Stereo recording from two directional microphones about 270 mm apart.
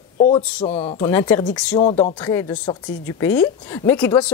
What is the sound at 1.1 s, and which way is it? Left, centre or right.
Speech, centre.